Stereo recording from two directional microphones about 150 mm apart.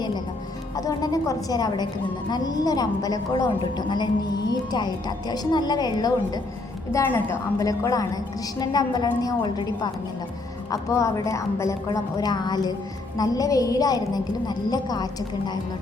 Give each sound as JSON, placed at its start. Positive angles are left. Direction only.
{"t": 0.8, "sound": "a woman's voice", "side_deg": 25}